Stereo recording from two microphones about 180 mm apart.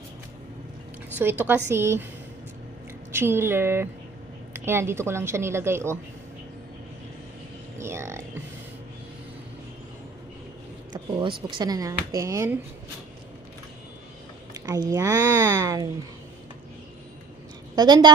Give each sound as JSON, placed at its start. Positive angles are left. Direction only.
{"t": 1.2, "sound": "a woman's voice", "side_deg": -10}
{"t": 3.1, "sound": "a woman's voice", "side_deg": -15}
{"t": 7.8, "sound": "music", "side_deg": -15}
{"t": 10.9, "sound": "speech", "side_deg": -25}
{"t": 14.5, "sound": "speech", "side_deg": -20}
{"t": 17.7, "sound": "speech", "side_deg": -25}